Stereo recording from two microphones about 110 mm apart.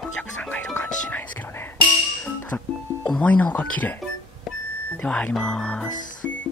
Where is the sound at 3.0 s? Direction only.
15° left (ahead or behind).